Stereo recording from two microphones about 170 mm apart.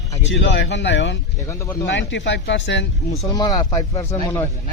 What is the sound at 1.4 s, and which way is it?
Speech, 15° left (ahead or behind).